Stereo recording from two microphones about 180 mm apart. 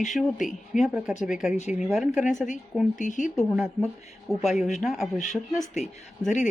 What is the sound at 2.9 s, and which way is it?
Speech, 45° left (ahead or behind).